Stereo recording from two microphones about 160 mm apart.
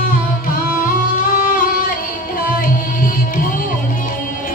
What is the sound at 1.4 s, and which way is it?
Music, 60° left (ahead or behind).